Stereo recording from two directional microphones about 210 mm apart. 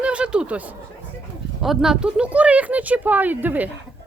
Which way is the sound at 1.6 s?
Centre (ahead or behind).